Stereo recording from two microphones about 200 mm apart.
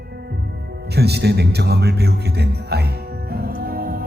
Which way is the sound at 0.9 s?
55° right (ahead or behind).